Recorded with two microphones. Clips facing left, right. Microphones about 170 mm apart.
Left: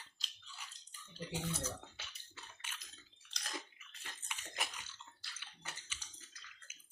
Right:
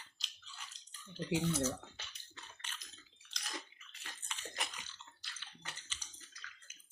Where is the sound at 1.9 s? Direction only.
5° left (ahead or behind).